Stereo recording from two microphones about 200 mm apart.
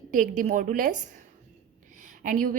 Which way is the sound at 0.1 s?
40° right (ahead or behind).